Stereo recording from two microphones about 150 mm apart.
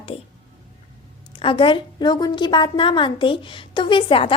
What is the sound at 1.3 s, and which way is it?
A woman's voice, 35° left (ahead or behind).